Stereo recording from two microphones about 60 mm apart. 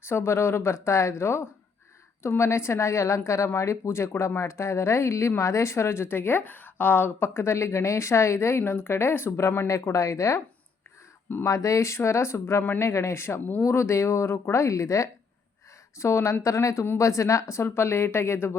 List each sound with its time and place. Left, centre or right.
0.0 s a woman's voice: left
9.6 s a woman's voice: left
11.4 s a woman's voice: left